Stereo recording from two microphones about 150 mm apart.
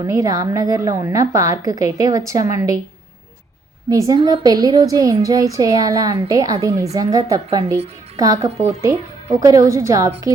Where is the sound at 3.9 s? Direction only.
25° right (ahead or behind).